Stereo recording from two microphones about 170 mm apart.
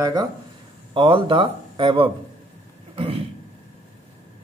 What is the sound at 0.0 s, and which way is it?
Speech, 20° right (ahead or behind).